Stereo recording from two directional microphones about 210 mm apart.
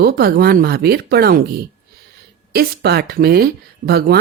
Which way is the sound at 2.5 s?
50° right (ahead or behind).